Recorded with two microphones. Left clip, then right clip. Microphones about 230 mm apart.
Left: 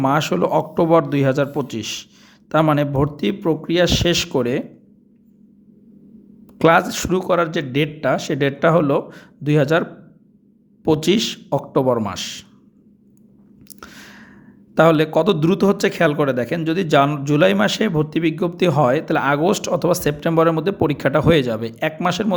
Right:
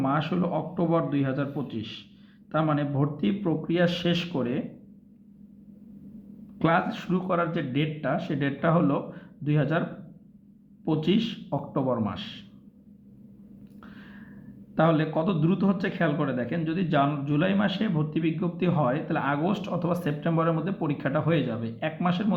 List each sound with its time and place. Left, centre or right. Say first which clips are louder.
0.0 s a man's voice: left 10 dB; left
6.6 s a man's voice: left 10 dB; left
10.8 s a man's voice: left 10 dB; left
13.7 s a sound: left 9 dB; left
14.8 s a man's voice: left 10 dB; left